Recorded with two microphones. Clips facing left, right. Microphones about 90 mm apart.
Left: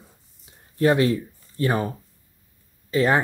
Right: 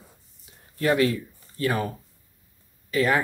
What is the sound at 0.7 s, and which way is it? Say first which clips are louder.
Speech: left 3 dB; 30° left (ahead or behind).